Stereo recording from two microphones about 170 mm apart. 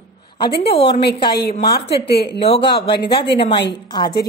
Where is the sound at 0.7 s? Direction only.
35° left (ahead or behind).